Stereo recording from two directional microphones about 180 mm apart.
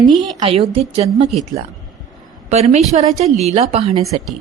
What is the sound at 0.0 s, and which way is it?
Speech, centre (ahead or behind).